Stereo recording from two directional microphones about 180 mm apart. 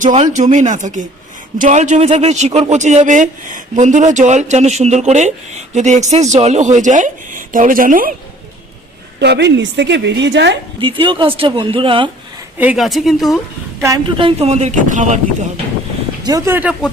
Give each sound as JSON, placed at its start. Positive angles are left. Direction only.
{"t": 0.0, "sound": "speech", "side_deg": -45}
{"t": 9.1, "sound": "a woman's voice", "side_deg": -70}
{"t": 10.8, "sound": "speech", "side_deg": -30}
{"t": 12.5, "sound": "speech", "side_deg": -5}
{"t": 14.2, "sound": "speech", "side_deg": -30}
{"t": 16.2, "sound": "speech", "side_deg": -20}
{"t": 16.6, "sound": "speech", "side_deg": -5}